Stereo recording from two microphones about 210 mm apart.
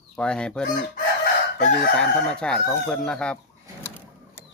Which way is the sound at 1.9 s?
5° left (ahead or behind).